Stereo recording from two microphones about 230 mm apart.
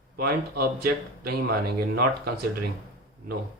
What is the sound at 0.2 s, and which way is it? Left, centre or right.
Speech, right.